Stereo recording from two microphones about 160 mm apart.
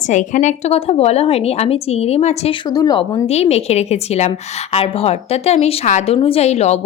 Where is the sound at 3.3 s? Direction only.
40° left (ahead or behind).